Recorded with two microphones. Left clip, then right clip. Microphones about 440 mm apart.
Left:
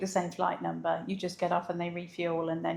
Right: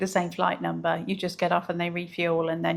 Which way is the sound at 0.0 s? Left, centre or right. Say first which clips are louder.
Right 5 dB; right.